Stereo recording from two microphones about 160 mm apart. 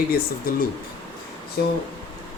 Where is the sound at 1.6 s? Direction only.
80° left.